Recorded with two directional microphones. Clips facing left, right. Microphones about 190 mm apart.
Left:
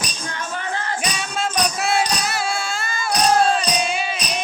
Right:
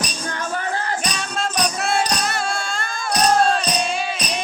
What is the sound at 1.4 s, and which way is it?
Insect, 5° left (ahead or behind).